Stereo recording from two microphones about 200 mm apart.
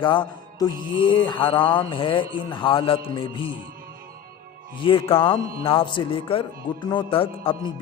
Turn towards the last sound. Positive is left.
turn(degrees=25)  # may be behind; listen again after turning